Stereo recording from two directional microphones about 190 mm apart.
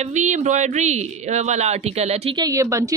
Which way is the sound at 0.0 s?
40° right (ahead or behind).